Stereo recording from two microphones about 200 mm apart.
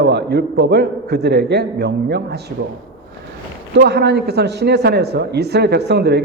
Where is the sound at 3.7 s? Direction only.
55° right (ahead or behind).